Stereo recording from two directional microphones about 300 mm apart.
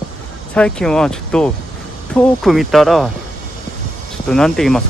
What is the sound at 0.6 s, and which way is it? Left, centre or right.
Speech, centre.